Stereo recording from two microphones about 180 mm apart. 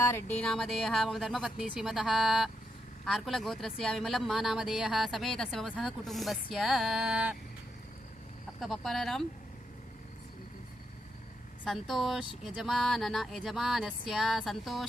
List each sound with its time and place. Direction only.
0.0 s speech: 15° left (ahead or behind)
0.4 s speech: 5° left (ahead or behind)
8.6 s speech: centre (ahead or behind)
11.6 s speech: centre (ahead or behind)